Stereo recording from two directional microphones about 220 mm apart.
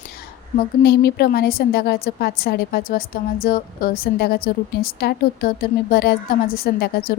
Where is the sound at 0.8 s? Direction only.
45° left (ahead or behind).